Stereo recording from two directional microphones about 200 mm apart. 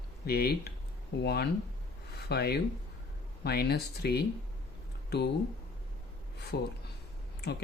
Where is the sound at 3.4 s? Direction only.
50° left (ahead or behind).